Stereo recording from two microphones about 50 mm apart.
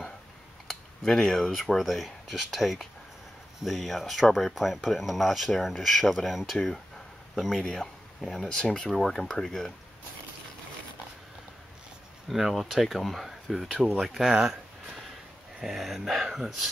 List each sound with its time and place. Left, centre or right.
0.7 s speech: centre
8.9 s speech: centre
12.3 s speech: centre
14.4 s a sound: centre
15.6 s speech: centre